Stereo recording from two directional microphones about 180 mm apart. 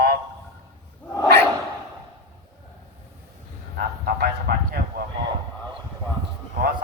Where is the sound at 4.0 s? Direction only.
60° right (ahead or behind).